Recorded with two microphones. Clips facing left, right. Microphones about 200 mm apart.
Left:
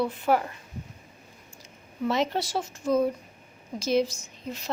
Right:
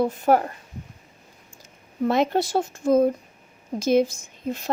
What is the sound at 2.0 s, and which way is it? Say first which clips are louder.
A woman's voice: right 5 dB; 50° right (ahead or behind).